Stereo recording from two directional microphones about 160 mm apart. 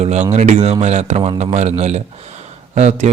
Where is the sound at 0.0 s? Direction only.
45° right (ahead or behind).